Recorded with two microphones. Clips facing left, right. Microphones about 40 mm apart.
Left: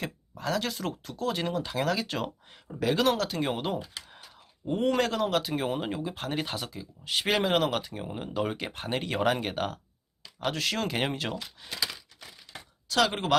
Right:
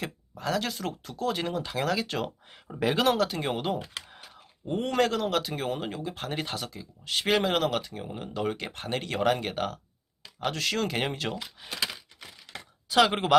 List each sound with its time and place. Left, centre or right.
0.0 s speech: centre
2.7 s speech: centre
3.0 s speech: centre
11.3 s speech: centre
12.9 s speech: centre